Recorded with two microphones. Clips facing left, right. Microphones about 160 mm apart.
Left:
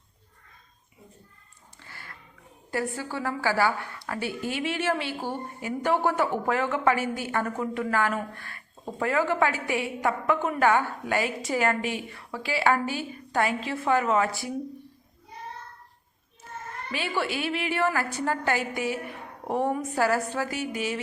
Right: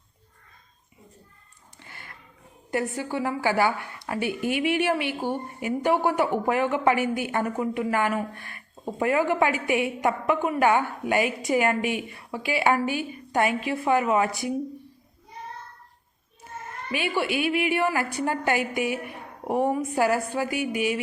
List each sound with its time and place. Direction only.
1.8 s dog: 20° right (ahead or behind)
2.7 s a woman's voice: 20° right (ahead or behind)
16.9 s a woman's voice: 15° right (ahead or behind)